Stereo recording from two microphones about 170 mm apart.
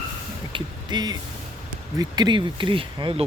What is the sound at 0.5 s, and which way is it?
Speech, 25° right (ahead or behind).